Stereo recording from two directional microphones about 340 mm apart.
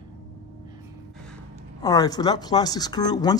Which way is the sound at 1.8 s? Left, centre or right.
Centre.